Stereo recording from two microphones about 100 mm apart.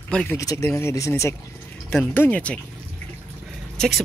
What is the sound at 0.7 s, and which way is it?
Speech, 25° left (ahead or behind).